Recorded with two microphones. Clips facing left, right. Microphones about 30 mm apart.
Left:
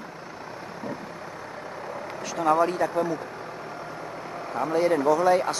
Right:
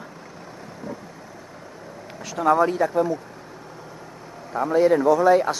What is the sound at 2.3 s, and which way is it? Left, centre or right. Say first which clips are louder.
Speech: right 3 dB; centre.